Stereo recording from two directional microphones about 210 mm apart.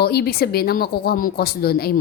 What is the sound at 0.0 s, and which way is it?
Speech, 50° left (ahead or behind).